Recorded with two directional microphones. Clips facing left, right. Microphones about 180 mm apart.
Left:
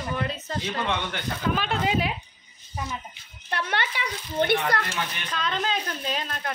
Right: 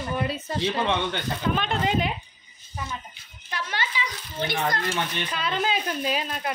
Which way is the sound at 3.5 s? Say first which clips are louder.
Left 2 dB; 60° left (ahead or behind).